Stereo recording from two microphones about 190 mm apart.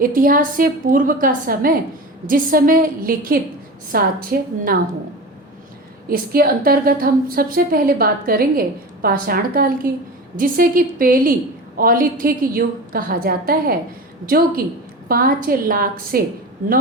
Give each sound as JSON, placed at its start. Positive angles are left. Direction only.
{"t": 0.0, "sound": "a woman's voice", "side_deg": -50}
{"t": 6.1, "sound": "a woman's voice", "side_deg": -50}